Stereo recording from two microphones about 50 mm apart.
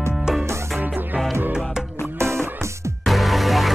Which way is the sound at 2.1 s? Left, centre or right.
Right.